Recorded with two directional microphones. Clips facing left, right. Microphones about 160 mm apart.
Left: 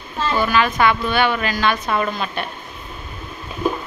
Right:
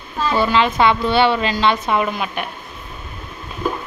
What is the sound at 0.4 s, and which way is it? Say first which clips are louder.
A woman's voice: right 2 dB; 25° right (ahead or behind).